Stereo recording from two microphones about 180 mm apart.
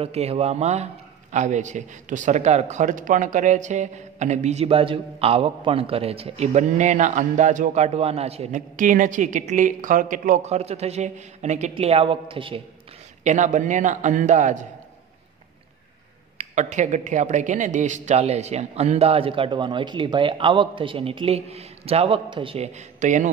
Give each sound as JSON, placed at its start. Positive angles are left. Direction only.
{"t": 0.0, "sound": "a man's voice", "side_deg": -35}
{"t": 13.2, "sound": "a man's voice", "side_deg": -40}
{"t": 16.3, "sound": "a man's voice", "side_deg": -40}